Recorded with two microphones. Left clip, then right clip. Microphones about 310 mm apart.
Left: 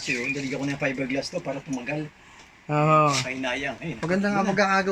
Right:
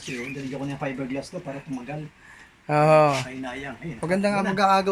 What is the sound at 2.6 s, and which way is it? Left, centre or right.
Speech, centre.